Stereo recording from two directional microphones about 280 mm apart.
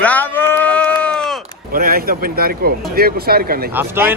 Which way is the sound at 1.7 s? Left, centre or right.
Right.